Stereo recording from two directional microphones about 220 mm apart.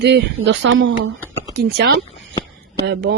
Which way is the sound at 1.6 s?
45° right (ahead or behind).